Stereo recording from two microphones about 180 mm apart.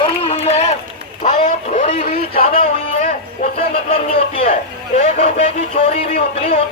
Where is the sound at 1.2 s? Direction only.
45° left (ahead or behind).